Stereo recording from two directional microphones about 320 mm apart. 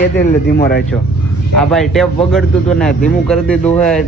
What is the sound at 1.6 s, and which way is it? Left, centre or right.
A man's voice, centre.